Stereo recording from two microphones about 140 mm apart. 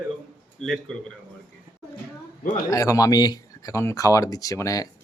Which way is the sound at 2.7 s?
25° left (ahead or behind).